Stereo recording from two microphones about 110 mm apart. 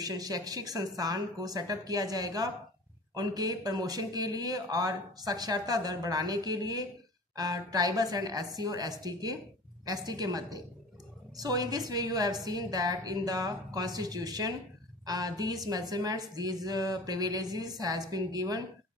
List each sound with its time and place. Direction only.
0.0 s speech: 35° right (ahead or behind)